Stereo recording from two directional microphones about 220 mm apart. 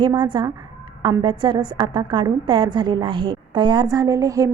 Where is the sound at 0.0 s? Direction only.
20° right (ahead or behind).